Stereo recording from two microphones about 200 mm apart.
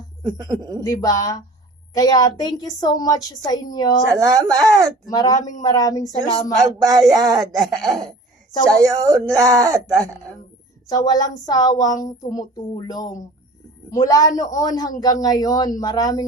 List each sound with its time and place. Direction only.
0.4 s speech: 20° right (ahead or behind)
0.9 s a man's voice: 15° left (ahead or behind)
4.1 s speech: 15° right (ahead or behind)
5.0 s a man's voice: 20° left (ahead or behind)
6.6 s speech: 15° right (ahead or behind)
10.8 s a man's voice: 20° left (ahead or behind)